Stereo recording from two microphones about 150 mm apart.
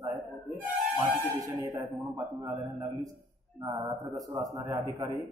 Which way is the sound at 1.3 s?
20° right (ahead or behind).